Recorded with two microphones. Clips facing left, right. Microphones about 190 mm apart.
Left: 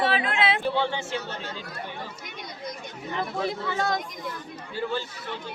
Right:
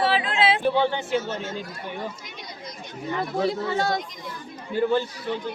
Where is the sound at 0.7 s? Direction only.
55° right (ahead or behind).